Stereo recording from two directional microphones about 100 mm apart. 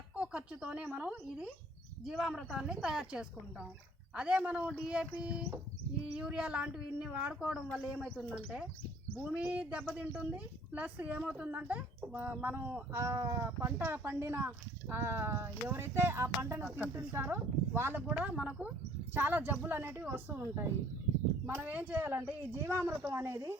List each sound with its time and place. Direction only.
0.2 s speech: 10° right (ahead or behind)
9.2 s speech: 15° right (ahead or behind)